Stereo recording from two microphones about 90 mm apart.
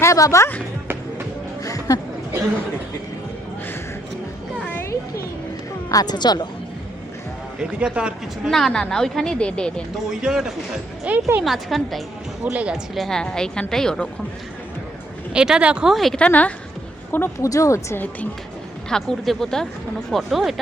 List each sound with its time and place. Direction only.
0.0 s speech: 35° left (ahead or behind)
1.6 s chatter: 40° left (ahead or behind)
5.9 s speech: 45° left (ahead or behind)
7.6 s speech: 10° right (ahead or behind)
8.4 s a woman's voice: 5° left (ahead or behind)
10.1 s speech: 5° right (ahead or behind)
11.4 s speech: centre (ahead or behind)
12.5 s speech: 10° right (ahead or behind)
12.9 s a woman's voice: 5° left (ahead or behind)
15.3 s speech: 10° right (ahead or behind)
16.1 s a woman's voice: 15° left (ahead or behind)
17.4 s speech: 35° left (ahead or behind)
18.9 s speech: 5° left (ahead or behind)